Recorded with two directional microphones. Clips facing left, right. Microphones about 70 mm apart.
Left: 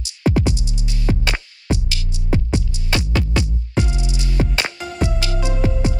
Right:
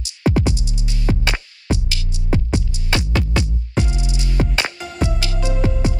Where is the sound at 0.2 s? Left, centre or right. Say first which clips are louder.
Even; right.